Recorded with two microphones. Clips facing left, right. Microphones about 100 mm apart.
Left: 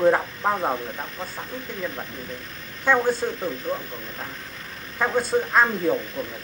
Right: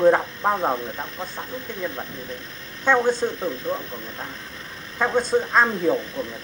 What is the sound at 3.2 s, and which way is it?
Speech, 5° right (ahead or behind).